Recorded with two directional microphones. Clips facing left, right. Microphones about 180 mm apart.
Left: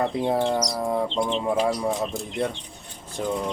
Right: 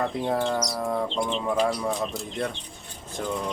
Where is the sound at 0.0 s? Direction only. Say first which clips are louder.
Left 3 dB; 25° left (ahead or behind).